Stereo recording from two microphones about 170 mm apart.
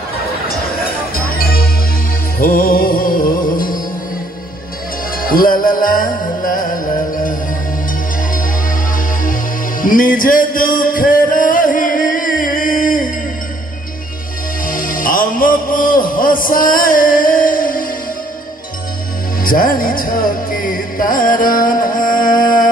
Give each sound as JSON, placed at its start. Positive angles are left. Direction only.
{"t": 1.1, "sound": "music", "side_deg": 60}
{"t": 5.1, "sound": "music", "side_deg": 55}
{"t": 8.3, "sound": "music", "side_deg": 50}
{"t": 14.7, "sound": "music", "side_deg": 55}
{"t": 19.4, "sound": "music", "side_deg": 55}